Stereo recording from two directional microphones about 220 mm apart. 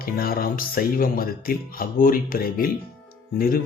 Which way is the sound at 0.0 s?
40° left (ahead or behind).